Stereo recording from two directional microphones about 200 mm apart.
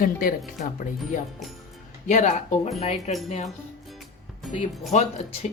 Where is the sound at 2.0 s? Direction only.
40° left (ahead or behind).